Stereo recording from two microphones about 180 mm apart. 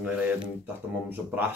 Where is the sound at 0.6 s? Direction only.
10° right (ahead or behind).